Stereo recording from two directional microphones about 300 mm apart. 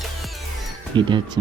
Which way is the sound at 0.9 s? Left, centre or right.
Centre.